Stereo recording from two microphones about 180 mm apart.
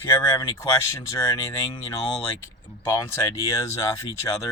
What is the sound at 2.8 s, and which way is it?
Speech, 15° left (ahead or behind).